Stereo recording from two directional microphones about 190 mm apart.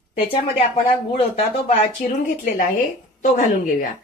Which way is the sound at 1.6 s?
40° left (ahead or behind).